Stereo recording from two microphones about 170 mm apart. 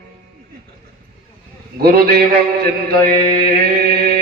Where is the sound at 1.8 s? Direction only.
65° right (ahead or behind).